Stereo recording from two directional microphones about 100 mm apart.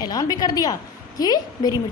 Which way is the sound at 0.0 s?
40° left (ahead or behind).